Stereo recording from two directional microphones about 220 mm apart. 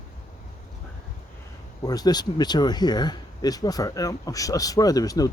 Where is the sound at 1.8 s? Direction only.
15° left (ahead or behind).